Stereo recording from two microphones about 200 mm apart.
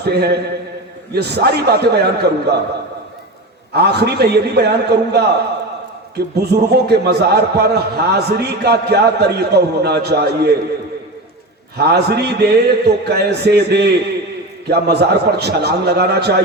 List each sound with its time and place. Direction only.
0.0 s a man's voice: 55° right (ahead or behind)
3.7 s a man's voice: 55° right (ahead or behind)
11.8 s a man's voice: 55° right (ahead or behind)